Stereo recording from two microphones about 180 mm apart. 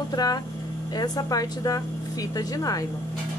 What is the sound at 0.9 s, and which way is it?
A woman's voice, 20° left (ahead or behind).